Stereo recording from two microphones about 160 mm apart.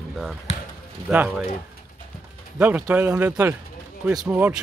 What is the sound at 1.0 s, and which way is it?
Speech, 10° right (ahead or behind).